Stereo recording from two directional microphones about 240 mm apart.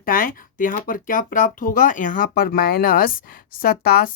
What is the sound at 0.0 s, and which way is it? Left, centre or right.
Speech, left.